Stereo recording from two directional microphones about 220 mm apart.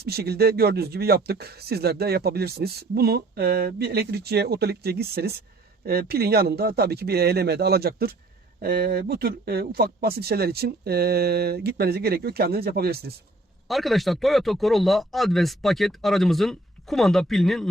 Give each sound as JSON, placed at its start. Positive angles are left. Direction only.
{"t": 0.0, "sound": "speech", "side_deg": -45}
{"t": 13.7, "sound": "speech", "side_deg": 0}